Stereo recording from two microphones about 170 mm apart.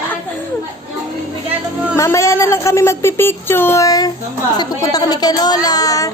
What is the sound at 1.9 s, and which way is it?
A woman's voice, 15° left (ahead or behind).